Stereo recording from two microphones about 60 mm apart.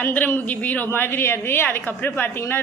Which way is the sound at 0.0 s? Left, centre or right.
Left.